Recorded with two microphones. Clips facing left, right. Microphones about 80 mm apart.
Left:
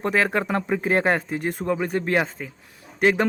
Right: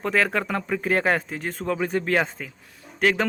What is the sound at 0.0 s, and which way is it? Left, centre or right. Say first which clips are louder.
Speech: left 1 dB; centre.